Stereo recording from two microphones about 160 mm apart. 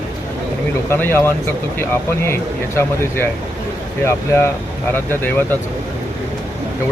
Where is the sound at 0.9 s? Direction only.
15° left (ahead or behind).